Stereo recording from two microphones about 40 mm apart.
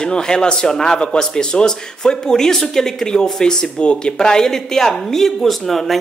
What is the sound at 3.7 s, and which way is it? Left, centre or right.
Speech, left.